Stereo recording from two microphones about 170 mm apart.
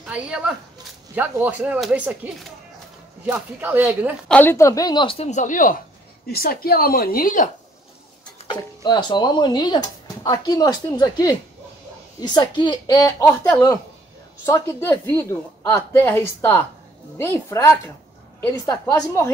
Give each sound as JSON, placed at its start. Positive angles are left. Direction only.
{"t": 0.0, "sound": "speech", "side_deg": -5}
{"t": 3.3, "sound": "speech", "side_deg": -10}
{"t": 4.3, "sound": "speech", "side_deg": 10}
{"t": 6.2, "sound": "speech", "side_deg": 60}
{"t": 8.5, "sound": "a woman's voice", "side_deg": 25}